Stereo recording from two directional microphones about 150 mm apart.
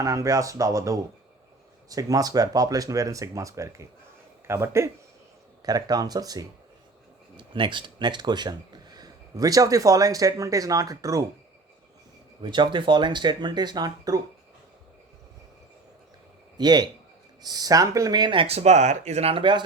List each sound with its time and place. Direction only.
0.0 s speech: 20° right (ahead or behind)
12.4 s speech: 30° right (ahead or behind)
16.6 s speech: 30° right (ahead or behind)